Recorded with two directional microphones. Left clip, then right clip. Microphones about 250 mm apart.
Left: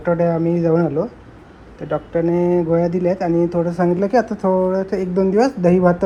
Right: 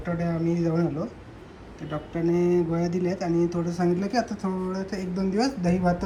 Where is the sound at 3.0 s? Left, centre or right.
Centre.